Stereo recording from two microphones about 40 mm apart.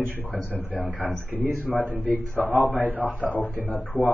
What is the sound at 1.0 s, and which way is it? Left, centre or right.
Speech, right.